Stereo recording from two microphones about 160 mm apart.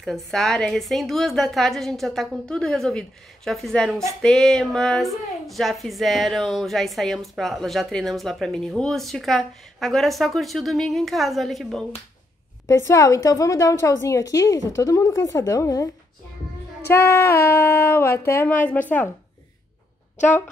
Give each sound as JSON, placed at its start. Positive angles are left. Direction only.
{"t": 0.0, "sound": "a woman's voice", "side_deg": 0}
{"t": 12.6, "sound": "a woman's voice", "side_deg": 20}
{"t": 16.8, "sound": "a sound", "side_deg": 15}